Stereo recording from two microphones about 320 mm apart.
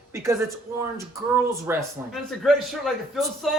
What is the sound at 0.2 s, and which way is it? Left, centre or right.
Speech, centre.